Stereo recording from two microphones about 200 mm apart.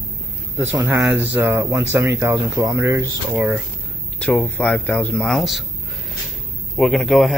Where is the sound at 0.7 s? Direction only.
10° right (ahead or behind).